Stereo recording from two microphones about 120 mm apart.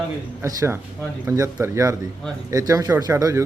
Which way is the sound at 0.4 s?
25° right (ahead or behind).